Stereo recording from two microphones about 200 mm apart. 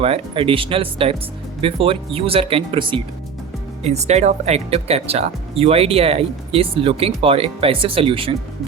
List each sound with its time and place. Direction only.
0.0 s speech: 30° right (ahead or behind)